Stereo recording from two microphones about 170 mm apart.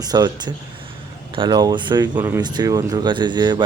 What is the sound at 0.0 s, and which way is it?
Speech, 25° right (ahead or behind).